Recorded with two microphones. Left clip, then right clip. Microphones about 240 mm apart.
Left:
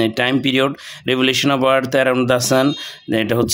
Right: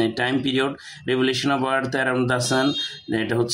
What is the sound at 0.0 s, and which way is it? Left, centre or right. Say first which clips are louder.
Speech: left 5 dB; left.